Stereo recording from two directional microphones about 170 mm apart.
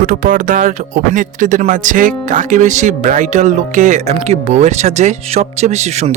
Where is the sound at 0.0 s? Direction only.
50° right (ahead or behind).